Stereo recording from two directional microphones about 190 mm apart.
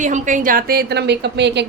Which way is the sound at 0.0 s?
40° right (ahead or behind).